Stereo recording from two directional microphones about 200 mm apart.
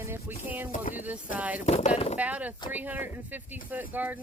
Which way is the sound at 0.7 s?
40° left (ahead or behind).